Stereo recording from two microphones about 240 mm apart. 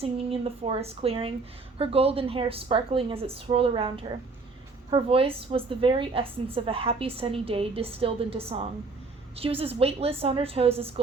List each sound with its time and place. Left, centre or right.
0.0 s a woman's voice: right